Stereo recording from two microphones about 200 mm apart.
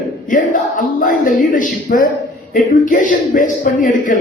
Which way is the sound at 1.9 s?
45° left (ahead or behind).